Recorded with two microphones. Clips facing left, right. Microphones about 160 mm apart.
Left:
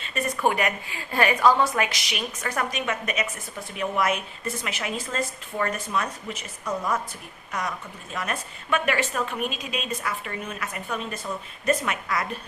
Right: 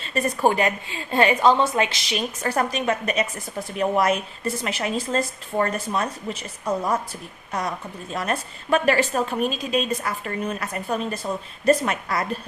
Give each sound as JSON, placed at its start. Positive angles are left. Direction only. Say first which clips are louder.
{"t": 0.0, "sound": "a woman's voice", "louder": "right 4 dB", "side_deg": -35}
{"t": 8.1, "sound": "a woman's voice", "louder": "right 5 dB", "side_deg": -35}